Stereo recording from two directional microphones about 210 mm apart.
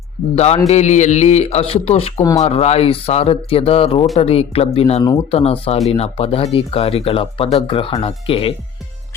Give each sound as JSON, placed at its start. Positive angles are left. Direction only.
{"t": 0.3, "sound": "speech", "side_deg": 30}